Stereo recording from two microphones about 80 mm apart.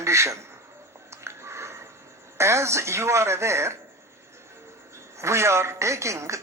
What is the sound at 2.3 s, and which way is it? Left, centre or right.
A woman's voice, right.